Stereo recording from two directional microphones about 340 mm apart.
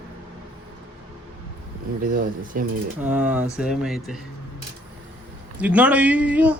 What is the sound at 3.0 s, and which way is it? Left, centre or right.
Speech, centre.